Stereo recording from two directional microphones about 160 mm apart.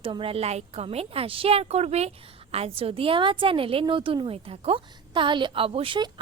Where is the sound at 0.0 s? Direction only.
35° right (ahead or behind).